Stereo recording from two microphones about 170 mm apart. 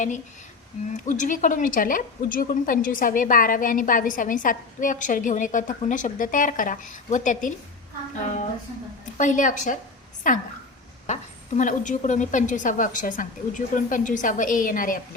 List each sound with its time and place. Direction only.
0.9 s a woman's voice: 50° left (ahead or behind)
9.1 s a woman's voice: 50° left (ahead or behind)